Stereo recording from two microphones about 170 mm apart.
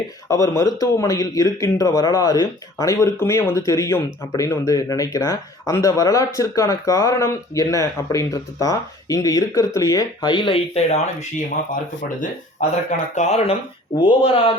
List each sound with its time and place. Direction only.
0.3 s a man's voice: 20° left (ahead or behind); by 11.4 s 40° left (ahead or behind)
13.1 s speech: 40° left (ahead or behind)